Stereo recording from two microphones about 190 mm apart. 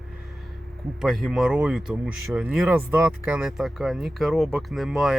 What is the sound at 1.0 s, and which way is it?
Speech, centre (ahead or behind).